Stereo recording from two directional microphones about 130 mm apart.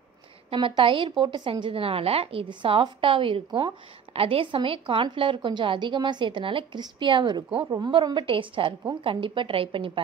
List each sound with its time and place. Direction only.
0.5 s a woman's voice: 40° right (ahead or behind)